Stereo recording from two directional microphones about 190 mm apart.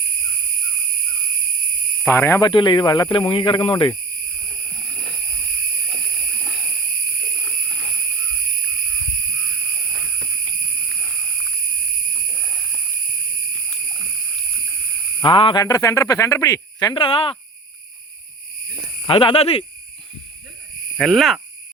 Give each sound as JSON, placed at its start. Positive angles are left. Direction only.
{"t": 2.0, "sound": "speech", "side_deg": 15}
{"t": 2.5, "sound": "speech", "side_deg": 25}
{"t": 15.2, "sound": "speech", "side_deg": 25}
{"t": 19.0, "sound": "speech", "side_deg": 30}
{"t": 21.0, "sound": "speech", "side_deg": 0}